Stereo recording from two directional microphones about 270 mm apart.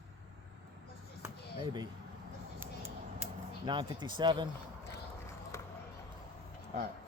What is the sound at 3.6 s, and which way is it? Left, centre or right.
Speech, centre.